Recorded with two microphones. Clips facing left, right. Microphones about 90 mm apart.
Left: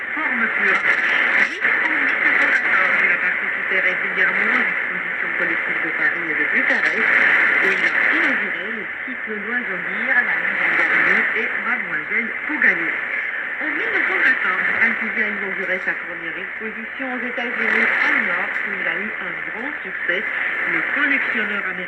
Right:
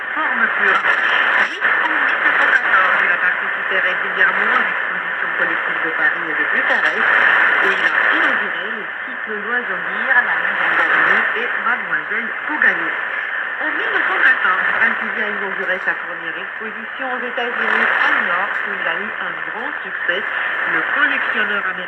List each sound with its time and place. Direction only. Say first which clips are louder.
0.2 s radio: right 4 dB; 45° right (ahead or behind)
5.4 s speech: right 3 dB; 45° right (ahead or behind)
10.1 s speech: right 4 dB; 45° right (ahead or behind)
17.3 s speech: right 3 dB; 50° right (ahead or behind)
20.7 s speech: right 4 dB; 45° right (ahead or behind)